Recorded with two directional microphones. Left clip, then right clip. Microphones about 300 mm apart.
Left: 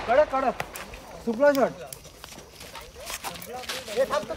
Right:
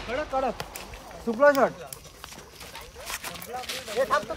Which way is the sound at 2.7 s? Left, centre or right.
Centre.